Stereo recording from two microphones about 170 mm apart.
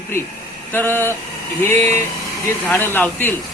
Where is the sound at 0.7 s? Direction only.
10° left (ahead or behind).